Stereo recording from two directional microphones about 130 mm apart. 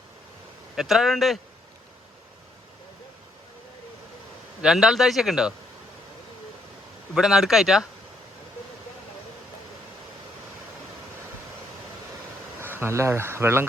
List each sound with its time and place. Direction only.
0.8 s a man's voice: centre (ahead or behind)
4.6 s a man's voice: 5° right (ahead or behind)
7.1 s a man's voice: 5° right (ahead or behind)
12.5 s speech: 15° right (ahead or behind)